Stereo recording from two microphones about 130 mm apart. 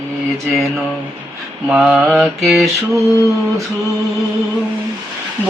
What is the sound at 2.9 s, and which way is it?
Mantra, 25° right (ahead or behind).